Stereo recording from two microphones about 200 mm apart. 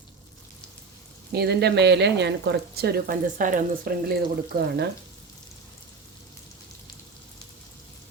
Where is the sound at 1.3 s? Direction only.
55° right (ahead or behind).